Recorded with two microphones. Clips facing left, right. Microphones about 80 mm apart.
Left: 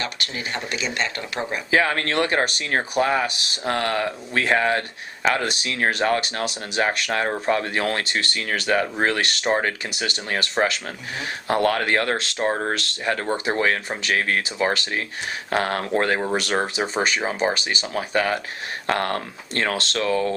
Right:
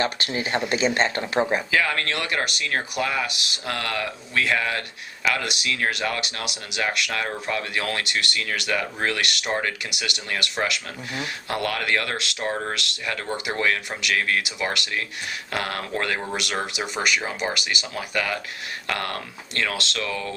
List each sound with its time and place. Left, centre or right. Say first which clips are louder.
0.0 s speech: right 4 dB; right
1.7 s speech: left 3 dB; left